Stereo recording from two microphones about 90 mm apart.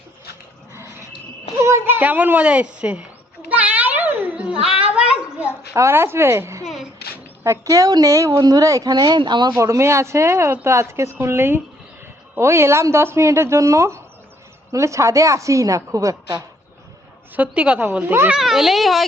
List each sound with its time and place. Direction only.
1.5 s a child's voice: 30° right (ahead or behind); by 3.0 s 15° right (ahead or behind)
3.5 s a sound: 15° right (ahead or behind)
4.5 s a child's voice: 90° left
4.8 s a sound: 15° right (ahead or behind)
5.7 s a child's voice: 30° right (ahead or behind); by 9.5 s 55° right (ahead or behind)
9.5 s a woman's voice: 35° right (ahead or behind)
17.3 s a woman's voice: 15° right (ahead or behind)
17.9 s a child's voice: 25° right (ahead or behind)
18.3 s speech: 5° right (ahead or behind)